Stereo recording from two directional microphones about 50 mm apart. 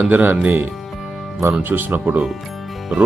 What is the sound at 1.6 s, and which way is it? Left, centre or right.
Speech, right.